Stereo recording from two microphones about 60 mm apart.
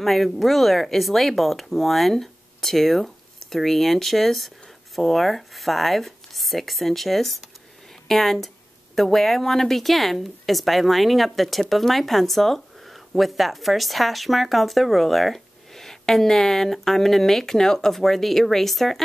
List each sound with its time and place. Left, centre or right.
0.0 s speech: centre